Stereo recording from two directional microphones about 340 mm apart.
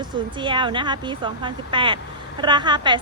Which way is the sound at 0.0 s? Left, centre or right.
Centre.